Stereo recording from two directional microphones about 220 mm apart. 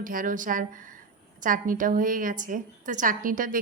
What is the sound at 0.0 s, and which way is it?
A woman's voice, 40° right (ahead or behind).